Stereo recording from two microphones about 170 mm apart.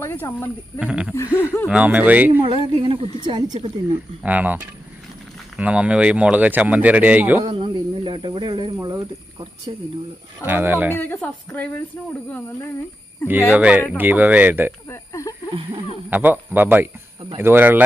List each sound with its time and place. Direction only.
0.0 s a woman's voice: 15° left (ahead or behind)
0.8 s speech: 5° right (ahead or behind)
1.1 s a woman's voice: 15° left (ahead or behind)
1.6 s speech: 5° right (ahead or behind)
2.4 s speech: 35° right (ahead or behind)
3.9 s speech: 10° right (ahead or behind)
5.5 s speech: 5° right (ahead or behind)
7.4 s speech: 30° right (ahead or behind)
10.4 s speech: 10° right (ahead or behind)
10.9 s a woman's voice: 10° left (ahead or behind)
13.5 s speech: 5° right (ahead or behind)
14.8 s a sound: 20° left (ahead or behind)
16.0 s speech: 10° right (ahead or behind)